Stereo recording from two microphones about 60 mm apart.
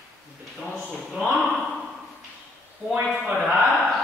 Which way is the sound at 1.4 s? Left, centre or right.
Centre.